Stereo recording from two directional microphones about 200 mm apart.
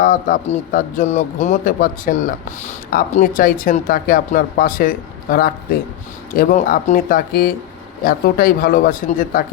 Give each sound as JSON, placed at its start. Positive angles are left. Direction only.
{"t": 0.0, "sound": "speech", "side_deg": 40}